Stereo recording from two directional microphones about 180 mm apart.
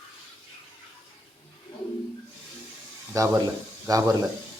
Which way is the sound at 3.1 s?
15° right (ahead or behind).